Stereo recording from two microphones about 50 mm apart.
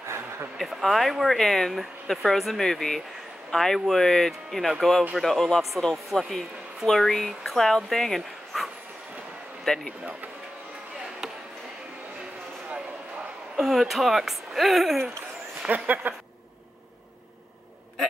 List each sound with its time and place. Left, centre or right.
0.6 s speech: centre
9.7 s speech: centre
13.6 s speech: centre
15.7 s speech: right